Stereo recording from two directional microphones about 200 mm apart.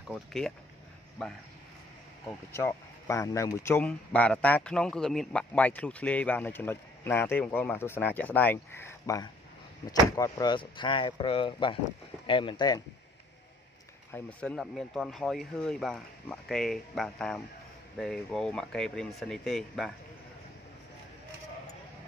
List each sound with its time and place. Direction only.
0.1 s speech: centre (ahead or behind); by 12.8 s 20° left (ahead or behind)
14.1 s speech: 5° left (ahead or behind)